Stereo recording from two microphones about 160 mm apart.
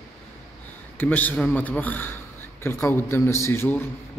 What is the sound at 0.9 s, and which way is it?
A man's voice, 10° left (ahead or behind).